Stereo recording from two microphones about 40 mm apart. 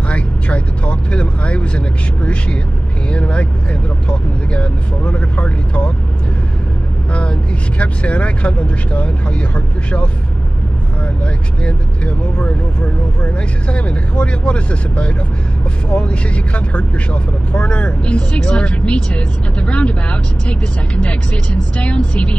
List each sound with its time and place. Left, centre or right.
0.1 s speech: left
7.8 s speech: left
11.6 s speech: left